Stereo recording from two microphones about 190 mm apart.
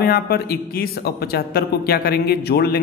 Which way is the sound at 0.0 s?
55° left (ahead or behind).